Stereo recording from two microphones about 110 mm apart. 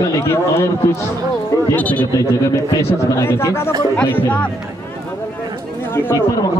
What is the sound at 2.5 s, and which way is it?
Speech, 25° left (ahead or behind).